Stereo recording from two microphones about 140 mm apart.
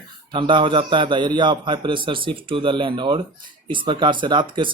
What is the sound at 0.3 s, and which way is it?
Speech, 35° right (ahead or behind).